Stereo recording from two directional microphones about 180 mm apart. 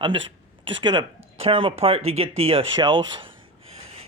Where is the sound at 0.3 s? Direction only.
25° right (ahead or behind).